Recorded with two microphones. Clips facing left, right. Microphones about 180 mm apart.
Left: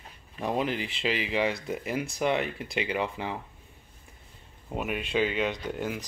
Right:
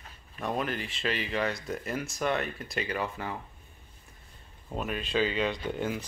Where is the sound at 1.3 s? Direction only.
15° left (ahead or behind).